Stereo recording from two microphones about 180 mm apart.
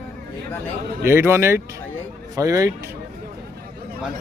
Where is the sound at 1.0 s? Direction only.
15° right (ahead or behind).